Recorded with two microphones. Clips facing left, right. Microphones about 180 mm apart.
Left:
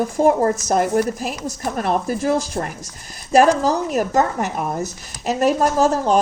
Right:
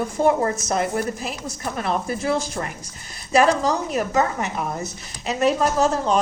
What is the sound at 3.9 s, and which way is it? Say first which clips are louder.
A woman's voice: left 3 dB; 45° left (ahead or behind).